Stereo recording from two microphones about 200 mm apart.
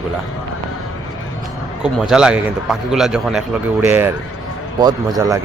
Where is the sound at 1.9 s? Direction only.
5° right (ahead or behind).